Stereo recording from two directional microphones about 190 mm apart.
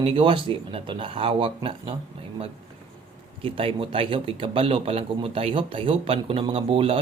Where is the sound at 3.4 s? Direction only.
30° right (ahead or behind).